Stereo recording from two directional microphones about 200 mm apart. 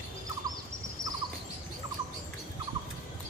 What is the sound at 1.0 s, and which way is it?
Bird, 15° right (ahead or behind).